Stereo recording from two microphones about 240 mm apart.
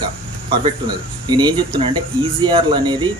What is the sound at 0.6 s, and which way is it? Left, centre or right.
Speech, centre.